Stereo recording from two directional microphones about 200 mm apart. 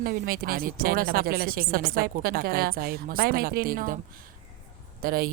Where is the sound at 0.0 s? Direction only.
50° right (ahead or behind).